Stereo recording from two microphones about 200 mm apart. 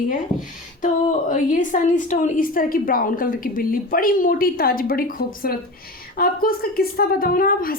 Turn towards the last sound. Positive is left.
turn(degrees=45)  # may be behind; listen again after turning